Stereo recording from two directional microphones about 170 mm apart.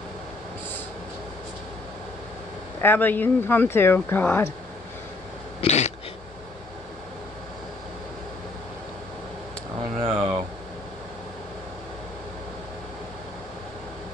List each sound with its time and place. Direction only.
2.8 s speech: 10° left (ahead or behind)
5.6 s throat clearing: 40° left (ahead or behind)
10.0 s a sound: 35° right (ahead or behind)